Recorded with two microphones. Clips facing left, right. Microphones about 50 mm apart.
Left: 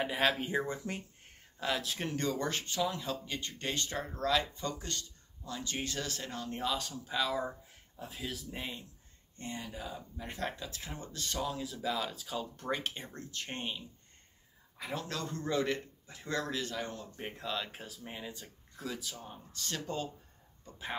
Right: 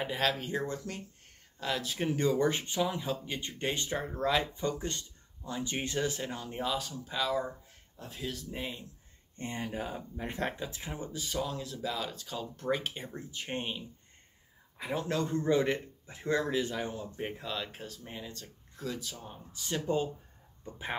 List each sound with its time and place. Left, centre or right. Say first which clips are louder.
0.0 s speech: left 1 dB; centre
1.6 s speech: right 1 dB; centre
9.4 s speech: right 5 dB; right; by 20.1 s centre